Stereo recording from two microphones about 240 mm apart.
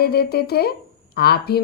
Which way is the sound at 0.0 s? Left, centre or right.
Left.